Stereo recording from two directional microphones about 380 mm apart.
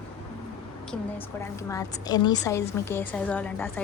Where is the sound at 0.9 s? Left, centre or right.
Centre.